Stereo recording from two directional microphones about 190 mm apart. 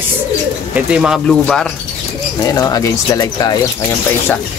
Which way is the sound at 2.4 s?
15° left (ahead or behind).